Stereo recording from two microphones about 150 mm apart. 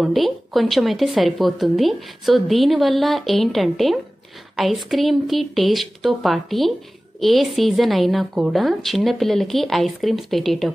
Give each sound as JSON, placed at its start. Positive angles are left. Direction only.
{"t": 0.0, "sound": "a woman's voice", "side_deg": 0}